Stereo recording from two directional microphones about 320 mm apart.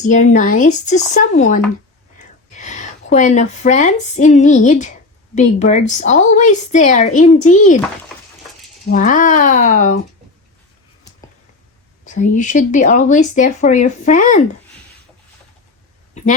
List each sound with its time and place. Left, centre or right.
0.0 s a woman's voice: left
8.9 s a woman's voice: left
12.0 s a woman's voice: left